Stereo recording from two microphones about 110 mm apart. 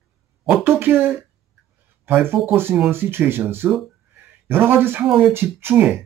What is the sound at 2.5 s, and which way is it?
Speech, 20° right (ahead or behind).